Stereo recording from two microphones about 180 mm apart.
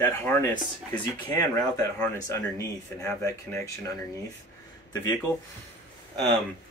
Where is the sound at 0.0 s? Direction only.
10° left (ahead or behind).